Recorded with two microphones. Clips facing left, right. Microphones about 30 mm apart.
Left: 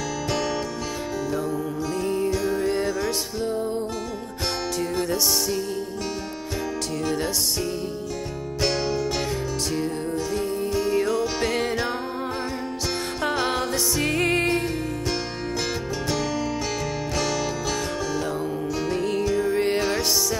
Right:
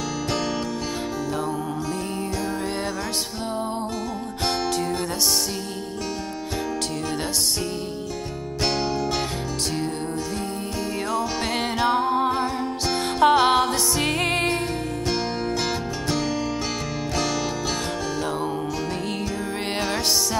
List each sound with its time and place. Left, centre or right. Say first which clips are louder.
10.9 s music: left 1 dB; centre
13.2 s music: right 9 dB; centre